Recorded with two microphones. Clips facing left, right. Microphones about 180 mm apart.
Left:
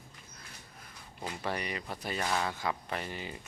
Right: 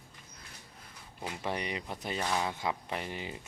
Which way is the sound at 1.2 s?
10° right (ahead or behind).